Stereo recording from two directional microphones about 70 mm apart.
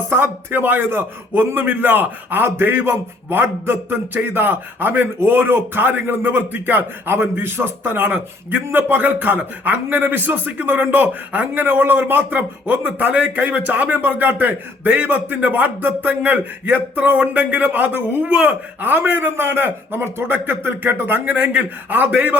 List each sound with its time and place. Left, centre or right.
0.1 s a man's voice: right